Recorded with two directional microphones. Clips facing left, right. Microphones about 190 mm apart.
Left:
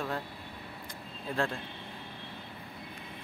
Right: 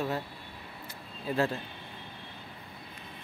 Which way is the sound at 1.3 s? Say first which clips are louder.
Right 3 dB; 5° right (ahead or behind).